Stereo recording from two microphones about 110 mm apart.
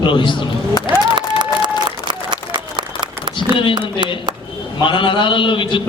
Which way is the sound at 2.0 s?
45° right (ahead or behind).